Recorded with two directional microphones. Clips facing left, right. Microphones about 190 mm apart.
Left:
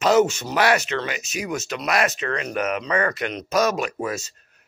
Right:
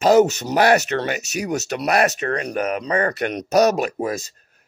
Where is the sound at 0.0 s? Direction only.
35° right (ahead or behind).